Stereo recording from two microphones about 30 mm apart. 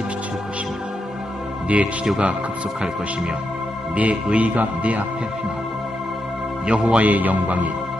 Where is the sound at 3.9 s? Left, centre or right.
Right.